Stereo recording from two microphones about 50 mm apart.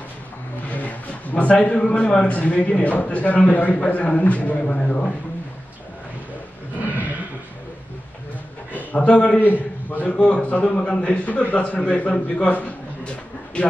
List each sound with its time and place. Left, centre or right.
0.7 s a man's voice: left
6.9 s a sound: right
8.7 s a man's voice: left
9.4 s a man's voice: left
12.4 s a man's voice: left